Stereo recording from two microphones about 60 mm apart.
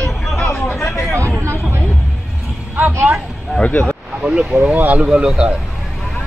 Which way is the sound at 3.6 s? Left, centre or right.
Left.